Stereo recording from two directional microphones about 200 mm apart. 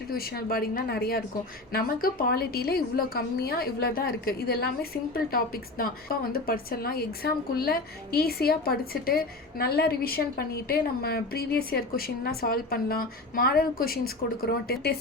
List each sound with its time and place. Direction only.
0.1 s a woman's voice: 50° left (ahead or behind)